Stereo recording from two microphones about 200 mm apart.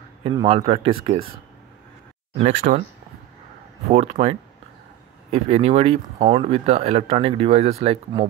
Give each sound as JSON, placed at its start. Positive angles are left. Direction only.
{"t": 0.2, "sound": "speech", "side_deg": -25}
{"t": 2.3, "sound": "speech", "side_deg": -35}
{"t": 3.9, "sound": "speech", "side_deg": -30}